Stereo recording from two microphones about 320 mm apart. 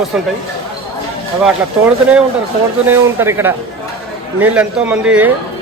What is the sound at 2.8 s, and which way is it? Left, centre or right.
Speech, centre.